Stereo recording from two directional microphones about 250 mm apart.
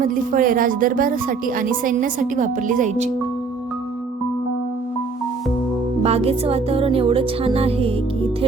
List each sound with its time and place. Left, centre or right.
0.0 s speech: right
6.0 s music: right